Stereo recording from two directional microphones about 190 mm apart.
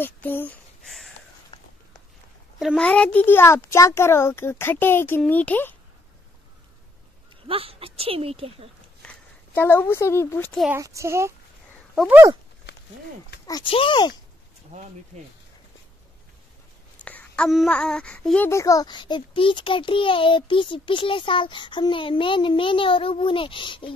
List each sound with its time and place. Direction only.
0.0 s speech: 10° left (ahead or behind)
2.6 s a child's voice: 5° left (ahead or behind)
7.4 s speech: 30° right (ahead or behind)
9.0 s speech: 10° left (ahead or behind)
10.8 s speech: 15° right (ahead or behind)
11.9 s speech: centre (ahead or behind)
13.5 s speech: 25° left (ahead or behind)
17.0 s speech: 5° left (ahead or behind); by 23.9 s 25° left (ahead or behind)